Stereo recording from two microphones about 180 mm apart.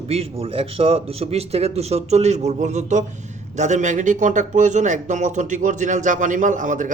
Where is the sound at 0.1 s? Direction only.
35° right (ahead or behind).